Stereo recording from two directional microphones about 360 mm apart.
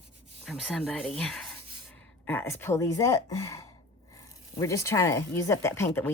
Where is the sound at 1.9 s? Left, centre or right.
Centre.